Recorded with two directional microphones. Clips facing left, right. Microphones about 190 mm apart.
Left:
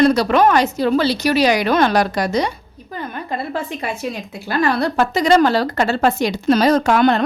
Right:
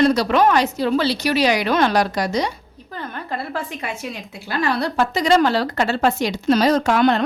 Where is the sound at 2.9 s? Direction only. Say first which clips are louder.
Left 3 dB; 15° left (ahead or behind).